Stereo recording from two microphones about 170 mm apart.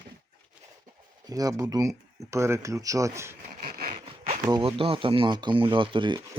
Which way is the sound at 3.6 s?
55° right (ahead or behind).